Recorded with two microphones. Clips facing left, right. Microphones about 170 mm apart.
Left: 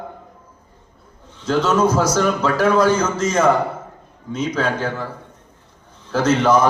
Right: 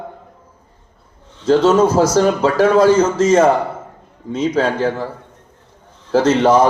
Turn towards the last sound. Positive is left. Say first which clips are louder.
# right 4 dB
turn(degrees=-30)  # may be behind; listen again after turning